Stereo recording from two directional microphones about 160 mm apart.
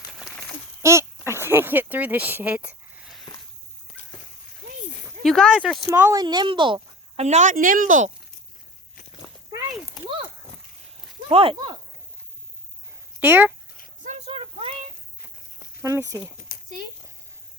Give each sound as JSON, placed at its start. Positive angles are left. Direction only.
{"t": 0.8, "sound": "speech", "side_deg": -15}
{"t": 5.2, "sound": "speech", "side_deg": 5}
{"t": 5.9, "sound": "speech", "side_deg": -20}
{"t": 7.2, "sound": "speech", "side_deg": -45}
{"t": 7.5, "sound": "speech", "side_deg": -60}
{"t": 11.3, "sound": "speech", "side_deg": -35}
{"t": 13.1, "sound": "speech", "side_deg": -10}
{"t": 14.3, "sound": "a sound", "side_deg": -35}
{"t": 15.2, "sound": "a sound", "side_deg": 70}
{"t": 15.8, "sound": "speech", "side_deg": -20}
{"t": 16.5, "sound": "a sound", "side_deg": 65}